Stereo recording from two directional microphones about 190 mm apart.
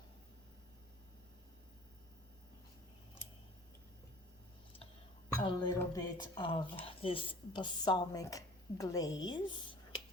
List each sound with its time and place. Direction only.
5.4 s a woman's voice: 25° left (ahead or behind)